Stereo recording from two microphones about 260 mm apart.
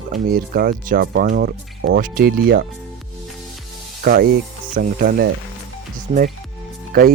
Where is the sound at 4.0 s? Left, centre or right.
Right.